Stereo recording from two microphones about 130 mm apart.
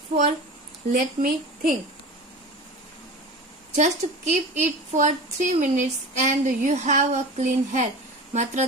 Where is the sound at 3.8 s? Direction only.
65° right (ahead or behind).